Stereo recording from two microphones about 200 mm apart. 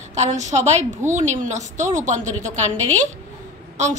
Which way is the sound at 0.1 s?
35° right (ahead or behind).